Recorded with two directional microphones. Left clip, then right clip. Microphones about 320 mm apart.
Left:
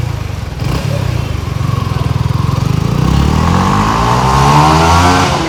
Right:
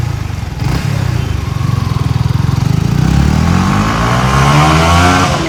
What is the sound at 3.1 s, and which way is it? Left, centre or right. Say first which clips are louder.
Vehicle: left 2 dB; centre.